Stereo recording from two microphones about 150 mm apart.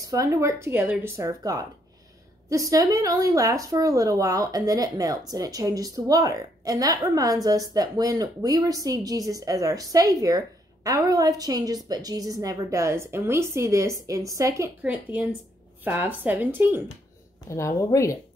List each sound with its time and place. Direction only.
0.0 s speech: 25° right (ahead or behind)
14.8 s speech: 10° right (ahead or behind)
17.5 s a woman's voice: 20° left (ahead or behind)